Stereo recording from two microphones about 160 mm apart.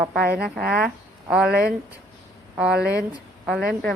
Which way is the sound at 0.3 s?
5° right (ahead or behind).